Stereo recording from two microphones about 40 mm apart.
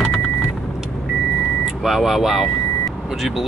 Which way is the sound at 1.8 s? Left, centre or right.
Centre.